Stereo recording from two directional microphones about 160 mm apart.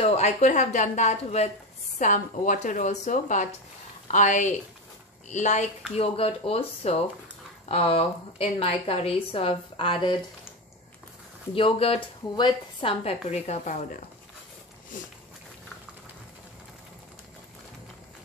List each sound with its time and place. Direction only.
0.0 s a woman's voice: 45° left (ahead or behind)
5.9 s a woman's voice: 35° left (ahead or behind)
11.5 s a woman's voice: 35° left (ahead or behind)